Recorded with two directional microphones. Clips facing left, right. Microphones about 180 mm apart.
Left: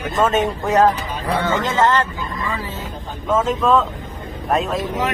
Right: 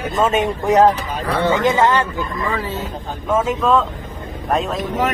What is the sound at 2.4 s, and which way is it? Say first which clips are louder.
Speech: right 3 dB; 65° right (ahead or behind).